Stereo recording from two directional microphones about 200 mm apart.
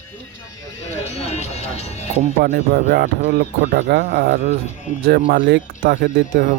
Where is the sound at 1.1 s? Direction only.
35° left (ahead or behind).